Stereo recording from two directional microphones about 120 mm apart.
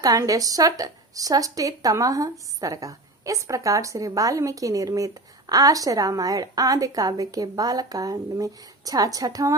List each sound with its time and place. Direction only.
0.0 s a woman's voice: 30° right (ahead or behind)